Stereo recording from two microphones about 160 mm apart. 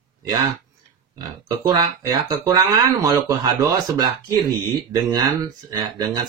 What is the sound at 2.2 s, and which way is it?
Speech, 25° right (ahead or behind).